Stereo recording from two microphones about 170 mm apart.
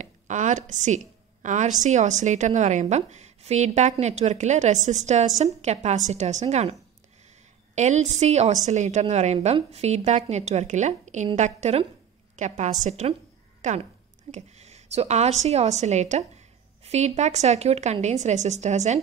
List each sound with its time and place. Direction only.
0.0 s a woman's voice: 45° right (ahead or behind)